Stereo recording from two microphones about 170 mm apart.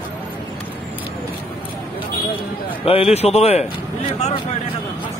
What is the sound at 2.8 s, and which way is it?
Speech, 35° left (ahead or behind).